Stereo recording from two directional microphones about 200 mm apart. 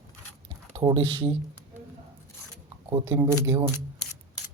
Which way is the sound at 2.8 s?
15° right (ahead or behind).